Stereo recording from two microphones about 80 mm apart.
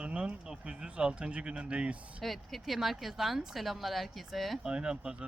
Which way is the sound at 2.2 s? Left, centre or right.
Centre.